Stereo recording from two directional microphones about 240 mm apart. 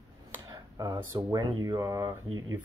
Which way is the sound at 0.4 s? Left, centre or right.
Centre.